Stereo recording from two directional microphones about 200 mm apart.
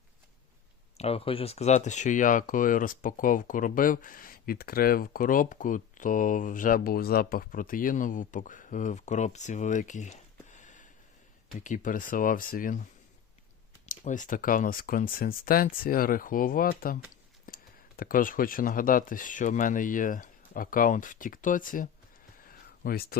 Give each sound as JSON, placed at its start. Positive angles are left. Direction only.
{"t": 0.9, "sound": "speech", "side_deg": 30}
{"t": 13.8, "sound": "speech", "side_deg": 40}
{"t": 22.4, "sound": "a sound", "side_deg": 45}